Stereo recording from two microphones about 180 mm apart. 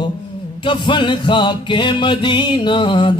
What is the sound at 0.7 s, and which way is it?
Music, 25° left (ahead or behind).